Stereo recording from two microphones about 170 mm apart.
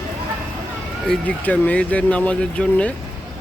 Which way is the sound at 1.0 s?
10° left (ahead or behind).